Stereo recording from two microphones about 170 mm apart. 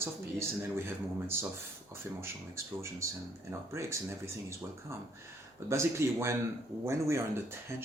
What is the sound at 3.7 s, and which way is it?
Speech, 15° right (ahead or behind).